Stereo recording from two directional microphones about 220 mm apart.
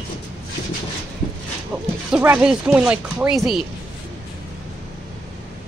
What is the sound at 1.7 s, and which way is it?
Speech, 5° right (ahead or behind).